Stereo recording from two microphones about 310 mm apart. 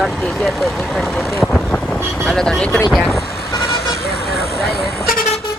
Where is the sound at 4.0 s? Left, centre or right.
Left.